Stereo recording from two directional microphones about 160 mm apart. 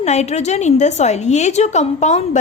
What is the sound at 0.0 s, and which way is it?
A woman's voice, 45° left (ahead or behind).